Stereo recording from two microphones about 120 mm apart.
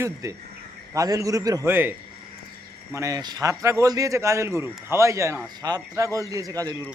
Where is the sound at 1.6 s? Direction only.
15° right (ahead or behind).